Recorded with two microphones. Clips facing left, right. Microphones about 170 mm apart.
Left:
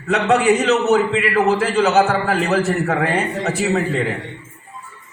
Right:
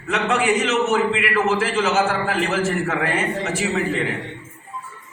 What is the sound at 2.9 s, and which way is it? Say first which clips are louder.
Speech: left 3 dB; 35° left (ahead or behind).